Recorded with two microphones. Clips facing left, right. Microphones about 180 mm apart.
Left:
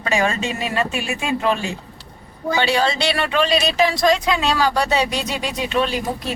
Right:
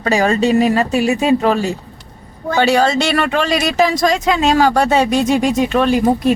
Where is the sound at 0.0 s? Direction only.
35° right (ahead or behind).